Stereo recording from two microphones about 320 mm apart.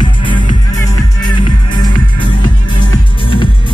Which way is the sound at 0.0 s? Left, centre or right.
Centre.